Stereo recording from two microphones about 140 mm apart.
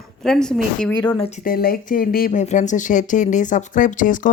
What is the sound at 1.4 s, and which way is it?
Speech, 90° left.